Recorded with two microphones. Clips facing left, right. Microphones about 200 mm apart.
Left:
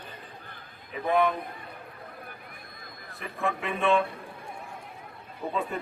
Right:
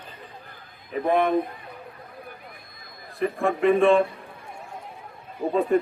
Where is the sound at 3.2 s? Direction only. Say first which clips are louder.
Right 10 dB; 35° right (ahead or behind).